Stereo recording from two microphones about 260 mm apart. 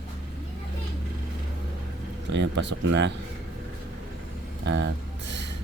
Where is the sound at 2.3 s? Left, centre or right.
Right.